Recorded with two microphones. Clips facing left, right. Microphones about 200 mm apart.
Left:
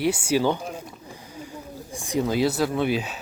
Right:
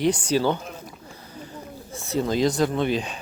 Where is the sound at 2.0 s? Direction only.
10° left (ahead or behind).